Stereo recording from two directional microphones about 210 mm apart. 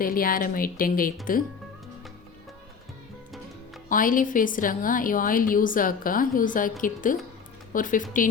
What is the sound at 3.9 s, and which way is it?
A woman's voice, 40° left (ahead or behind).